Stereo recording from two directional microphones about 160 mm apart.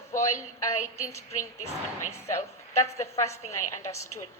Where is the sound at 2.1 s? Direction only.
15° left (ahead or behind).